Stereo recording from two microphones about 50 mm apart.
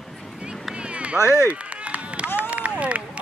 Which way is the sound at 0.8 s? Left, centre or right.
Right.